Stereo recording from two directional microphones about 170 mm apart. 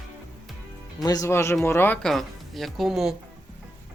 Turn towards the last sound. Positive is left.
turn(degrees=0)  # may be behind; listen again after turning